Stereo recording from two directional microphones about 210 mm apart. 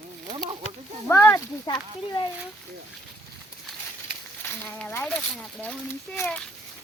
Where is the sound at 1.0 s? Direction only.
10° left (ahead or behind).